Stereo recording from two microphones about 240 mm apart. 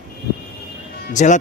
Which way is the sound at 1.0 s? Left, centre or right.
Left.